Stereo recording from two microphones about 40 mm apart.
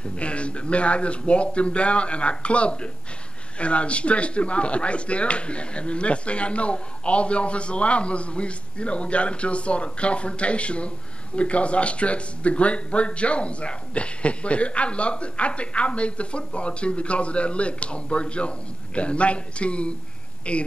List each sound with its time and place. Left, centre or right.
0.1 s speech: left